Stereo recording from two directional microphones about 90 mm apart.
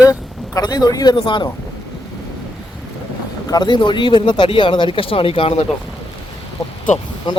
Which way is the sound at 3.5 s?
55° left (ahead or behind).